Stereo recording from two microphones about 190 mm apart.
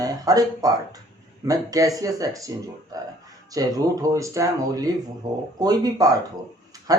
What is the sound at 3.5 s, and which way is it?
Speech, 20° right (ahead or behind).